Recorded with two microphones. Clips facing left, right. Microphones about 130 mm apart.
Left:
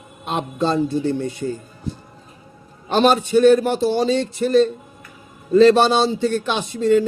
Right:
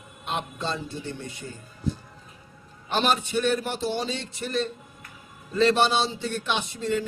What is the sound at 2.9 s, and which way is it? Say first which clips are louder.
A man's voice: left 9 dB; 35° left (ahead or behind).